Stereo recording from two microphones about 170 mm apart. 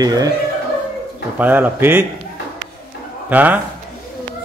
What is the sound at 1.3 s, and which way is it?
Speech, 10° right (ahead or behind).